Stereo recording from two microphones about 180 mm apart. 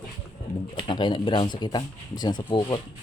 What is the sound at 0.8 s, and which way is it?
Speech, 25° left (ahead or behind).